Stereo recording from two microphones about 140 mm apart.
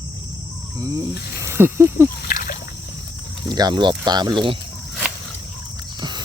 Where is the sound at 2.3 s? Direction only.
90° left.